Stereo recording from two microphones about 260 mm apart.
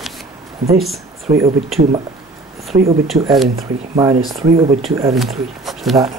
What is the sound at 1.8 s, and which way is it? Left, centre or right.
Speech, right.